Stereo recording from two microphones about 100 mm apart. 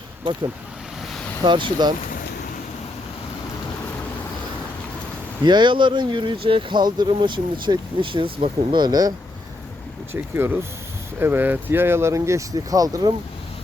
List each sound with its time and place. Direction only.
1.5 s speech: 55° right (ahead or behind)
5.5 s speech: 50° right (ahead or behind)
8.8 s speech: 40° right (ahead or behind)
10.1 s speech: 25° right (ahead or behind)